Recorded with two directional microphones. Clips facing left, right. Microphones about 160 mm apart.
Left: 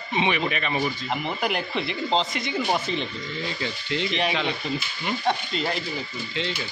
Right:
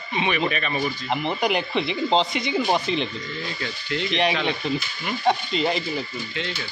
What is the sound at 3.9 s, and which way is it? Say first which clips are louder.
Speech: even; 25° left (ahead or behind).